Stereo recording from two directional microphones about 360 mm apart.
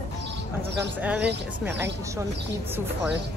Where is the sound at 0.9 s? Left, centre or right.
Centre.